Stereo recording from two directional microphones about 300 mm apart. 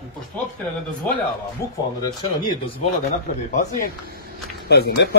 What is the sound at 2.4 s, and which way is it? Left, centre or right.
Speech, left.